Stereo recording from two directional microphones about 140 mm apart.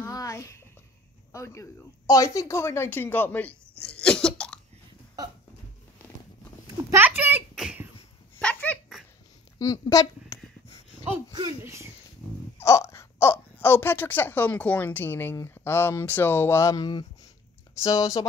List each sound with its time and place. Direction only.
0.0 s a sound: 20° left (ahead or behind)
1.3 s speech: 20° left (ahead or behind)
3.8 s cough: 5° left (ahead or behind)
6.9 s a sound: 15° right (ahead or behind)
7.5 s beatboxing: 5° right (ahead or behind)
8.4 s a sound: 10° left (ahead or behind)
9.6 s speech: 25° left (ahead or behind)
11.6 s speech: 20° right (ahead or behind)
12.5 s speech: 20° left (ahead or behind)